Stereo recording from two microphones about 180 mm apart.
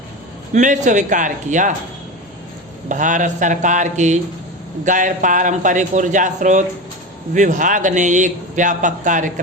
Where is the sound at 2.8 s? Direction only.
45° right (ahead or behind).